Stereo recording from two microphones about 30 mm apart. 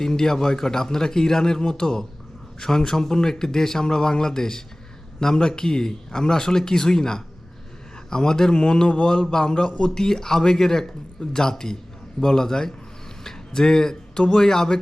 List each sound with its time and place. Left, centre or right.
0.0 s a man's voice: centre
13.2 s a sound: left
14.3 s a man's voice: left